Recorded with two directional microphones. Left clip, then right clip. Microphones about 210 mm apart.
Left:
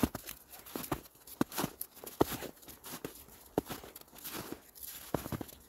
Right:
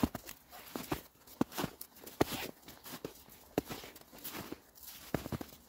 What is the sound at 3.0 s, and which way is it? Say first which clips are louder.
Walk: left 1 dB; 15° left (ahead or behind).